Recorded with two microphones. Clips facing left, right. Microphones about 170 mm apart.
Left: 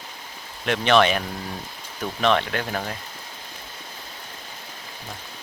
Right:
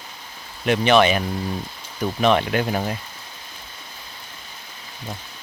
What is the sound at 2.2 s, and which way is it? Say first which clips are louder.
Speech: right 3 dB; 10° right (ahead or behind).